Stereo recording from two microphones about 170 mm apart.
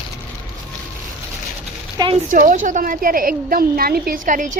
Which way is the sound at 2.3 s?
50° right (ahead or behind).